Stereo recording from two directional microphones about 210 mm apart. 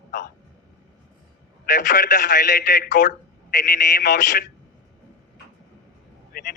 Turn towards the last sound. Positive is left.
turn(degrees=45)  # may be behind; listen again after turning